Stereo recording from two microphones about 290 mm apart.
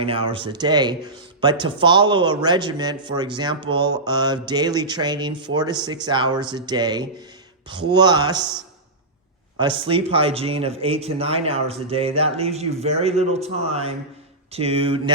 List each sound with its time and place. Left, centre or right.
0.0 s mantra: centre
9.6 s speech: centre